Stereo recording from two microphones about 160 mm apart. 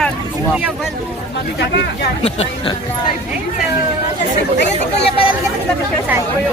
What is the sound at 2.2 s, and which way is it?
Speech, 40° left (ahead or behind).